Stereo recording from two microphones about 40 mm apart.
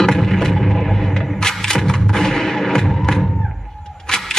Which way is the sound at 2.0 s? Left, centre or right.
Centre.